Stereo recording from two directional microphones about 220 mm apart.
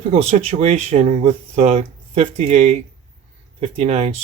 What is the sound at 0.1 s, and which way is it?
Speech, 30° right (ahead or behind).